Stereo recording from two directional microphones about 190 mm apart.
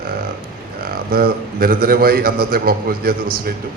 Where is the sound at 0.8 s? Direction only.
50° right (ahead or behind).